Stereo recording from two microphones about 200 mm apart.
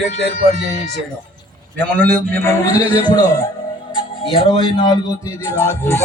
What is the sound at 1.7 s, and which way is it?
A man's voice, 10° left (ahead or behind).